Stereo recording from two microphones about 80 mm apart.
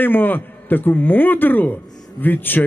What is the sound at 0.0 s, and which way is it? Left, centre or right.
Speech, left.